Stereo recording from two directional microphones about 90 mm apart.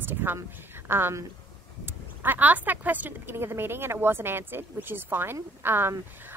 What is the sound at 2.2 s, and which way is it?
A woman's voice, 20° right (ahead or behind).